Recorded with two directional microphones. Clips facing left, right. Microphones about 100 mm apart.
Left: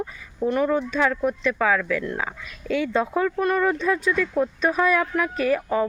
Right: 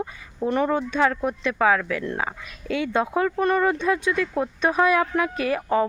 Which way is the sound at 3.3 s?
30° right (ahead or behind).